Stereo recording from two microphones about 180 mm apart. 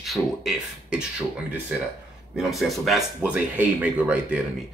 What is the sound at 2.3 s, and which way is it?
Speech, centre (ahead or behind).